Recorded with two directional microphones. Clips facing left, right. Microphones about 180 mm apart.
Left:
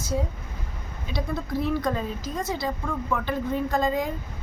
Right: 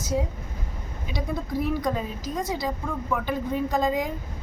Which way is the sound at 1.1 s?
15° right (ahead or behind).